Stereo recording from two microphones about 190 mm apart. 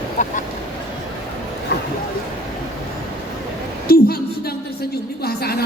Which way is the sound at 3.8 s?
50° left (ahead or behind).